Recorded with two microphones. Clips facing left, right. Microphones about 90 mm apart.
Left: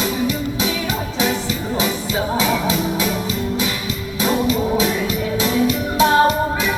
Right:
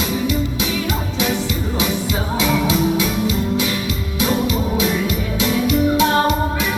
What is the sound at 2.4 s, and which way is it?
Music, 40° left (ahead or behind).